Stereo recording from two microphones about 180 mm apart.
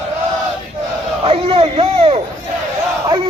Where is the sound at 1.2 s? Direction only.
30° right (ahead or behind).